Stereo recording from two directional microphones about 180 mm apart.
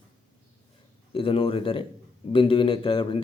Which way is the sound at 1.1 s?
30° left (ahead or behind).